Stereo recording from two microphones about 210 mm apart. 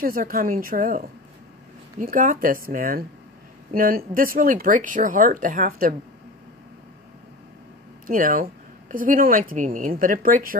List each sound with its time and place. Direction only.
0.0 s speech: 45° right (ahead or behind)
8.1 s speech: 40° right (ahead or behind)